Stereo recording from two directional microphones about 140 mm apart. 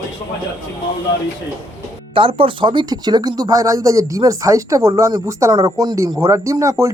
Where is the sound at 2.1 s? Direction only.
40° right (ahead or behind).